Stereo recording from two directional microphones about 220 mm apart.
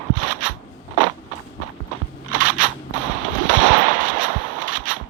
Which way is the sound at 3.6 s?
35° right (ahead or behind).